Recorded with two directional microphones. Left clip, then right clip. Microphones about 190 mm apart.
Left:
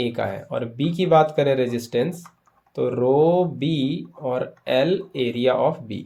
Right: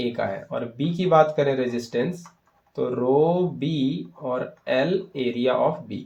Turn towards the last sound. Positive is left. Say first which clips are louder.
# left 1 dB
turn(degrees=45)  # may be behind; listen again after turning